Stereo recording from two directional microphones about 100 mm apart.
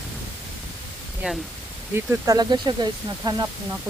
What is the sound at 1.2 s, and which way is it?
Speech, 10° right (ahead or behind).